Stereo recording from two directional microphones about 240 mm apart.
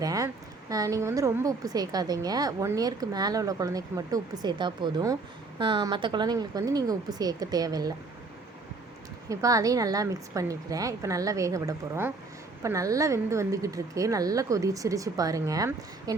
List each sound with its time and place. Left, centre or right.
0.0 s a sound: centre
0.7 s a woman's voice: centre
9.3 s a woman's voice: centre